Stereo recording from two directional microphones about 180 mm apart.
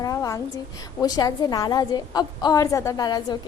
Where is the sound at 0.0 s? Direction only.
20° left (ahead or behind).